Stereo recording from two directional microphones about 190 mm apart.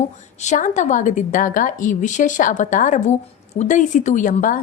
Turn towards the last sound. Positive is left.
turn(degrees=45)  # may be behind; listen again after turning